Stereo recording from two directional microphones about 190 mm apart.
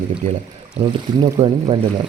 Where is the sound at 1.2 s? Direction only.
25° right (ahead or behind).